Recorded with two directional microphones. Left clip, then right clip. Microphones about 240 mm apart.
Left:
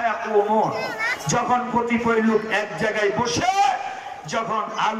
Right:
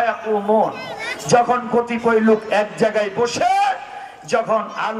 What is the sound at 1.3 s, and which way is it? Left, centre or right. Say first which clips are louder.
A man's voice: right 8 dB; right.